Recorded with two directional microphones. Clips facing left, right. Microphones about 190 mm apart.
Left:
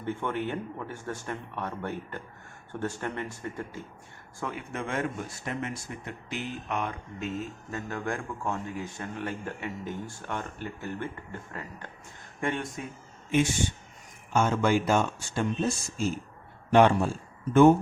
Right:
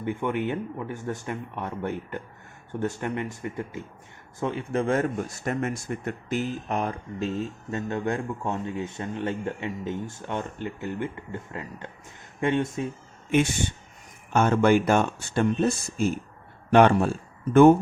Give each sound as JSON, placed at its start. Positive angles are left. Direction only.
{"t": 0.0, "sound": "speech", "side_deg": -15}
{"t": 14.3, "sound": "speech", "side_deg": -60}